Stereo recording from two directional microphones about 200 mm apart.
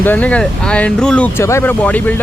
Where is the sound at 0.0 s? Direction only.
10° left (ahead or behind).